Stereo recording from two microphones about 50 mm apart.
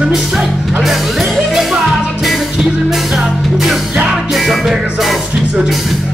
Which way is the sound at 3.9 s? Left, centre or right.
Centre.